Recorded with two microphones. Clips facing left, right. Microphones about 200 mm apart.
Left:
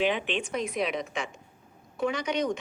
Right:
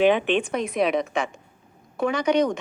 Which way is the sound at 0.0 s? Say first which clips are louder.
Right 8 dB; 55° right (ahead or behind).